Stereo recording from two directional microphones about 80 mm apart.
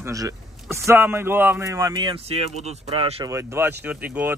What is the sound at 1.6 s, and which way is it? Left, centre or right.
Speech, right.